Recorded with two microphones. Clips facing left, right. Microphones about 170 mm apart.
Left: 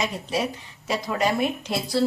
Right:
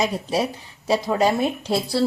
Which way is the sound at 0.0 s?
35° right (ahead or behind).